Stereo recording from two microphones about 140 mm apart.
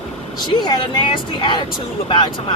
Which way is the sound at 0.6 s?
30° left (ahead or behind).